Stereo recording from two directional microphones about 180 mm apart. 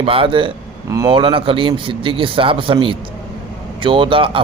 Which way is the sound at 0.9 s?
20° right (ahead or behind).